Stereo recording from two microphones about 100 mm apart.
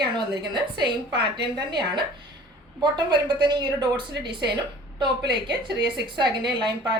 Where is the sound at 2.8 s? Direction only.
50° right (ahead or behind).